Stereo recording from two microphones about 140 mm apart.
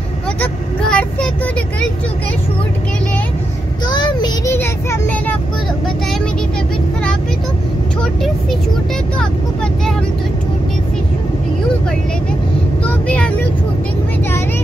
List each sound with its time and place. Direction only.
0.4 s vehicle: 10° left (ahead or behind)
3.9 s child singing: 30° left (ahead or behind)
8.0 s speech: centre (ahead or behind)
12.8 s vehicle: 10° left (ahead or behind)